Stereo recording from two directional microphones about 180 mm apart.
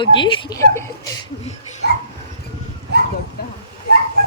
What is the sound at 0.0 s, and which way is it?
Speech, 25° left (ahead or behind).